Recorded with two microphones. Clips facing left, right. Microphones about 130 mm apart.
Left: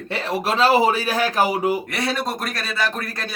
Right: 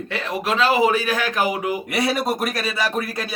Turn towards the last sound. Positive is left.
turn(degrees=-5)  # may be behind; listen again after turning